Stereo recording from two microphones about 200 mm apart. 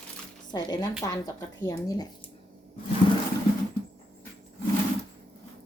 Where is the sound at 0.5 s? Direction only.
20° left (ahead or behind).